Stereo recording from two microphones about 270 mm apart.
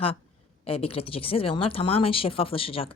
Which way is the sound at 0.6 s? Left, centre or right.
Left.